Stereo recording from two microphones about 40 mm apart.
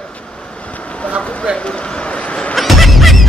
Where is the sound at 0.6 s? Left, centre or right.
Left.